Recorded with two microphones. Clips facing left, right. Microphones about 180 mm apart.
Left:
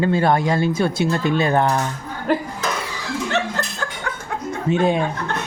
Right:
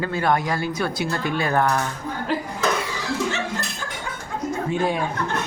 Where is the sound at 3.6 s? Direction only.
65° left (ahead or behind).